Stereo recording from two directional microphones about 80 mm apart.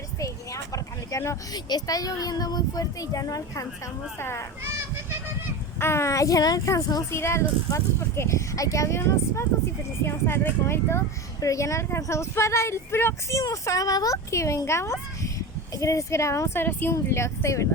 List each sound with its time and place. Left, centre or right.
0.2 s a sound: left
1.5 s speech: left
4.2 s speech: left
5.8 s speech: left
11.3 s speech: left
13.4 s speech: left